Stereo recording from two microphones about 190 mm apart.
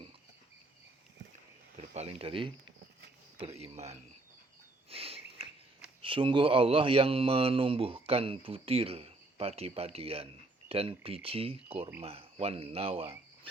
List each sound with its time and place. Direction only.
1.9 s speech: 35° right (ahead or behind)
4.9 s a sound: 30° right (ahead or behind)
6.0 s a man's voice: 25° right (ahead or behind)